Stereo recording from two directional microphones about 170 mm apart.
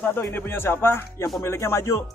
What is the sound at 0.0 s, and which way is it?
Speech, 10° left (ahead or behind).